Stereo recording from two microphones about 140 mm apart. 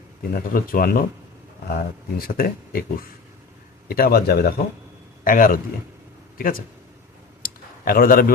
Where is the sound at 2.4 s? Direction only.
90° left.